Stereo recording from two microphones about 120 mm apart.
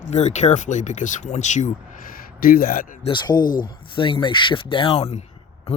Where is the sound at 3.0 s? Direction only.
35° left (ahead or behind).